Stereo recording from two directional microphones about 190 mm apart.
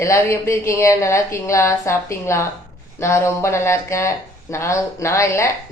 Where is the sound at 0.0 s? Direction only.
15° left (ahead or behind).